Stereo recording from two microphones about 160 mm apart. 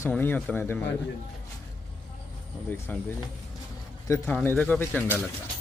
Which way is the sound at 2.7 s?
10° left (ahead or behind).